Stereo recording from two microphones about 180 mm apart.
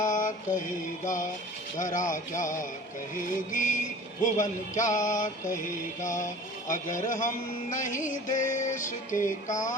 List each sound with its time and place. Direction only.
0.0 s mantra: 45° left (ahead or behind)
1.8 s music: 45° left (ahead or behind)